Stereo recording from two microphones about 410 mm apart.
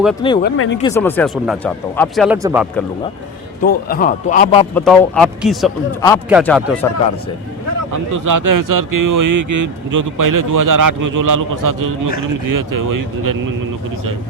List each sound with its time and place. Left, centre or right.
0.4 s a man's voice: left
0.8 s speech: centre
3.6 s a man's voice: left
4.7 s speech: centre
8.1 s speech: right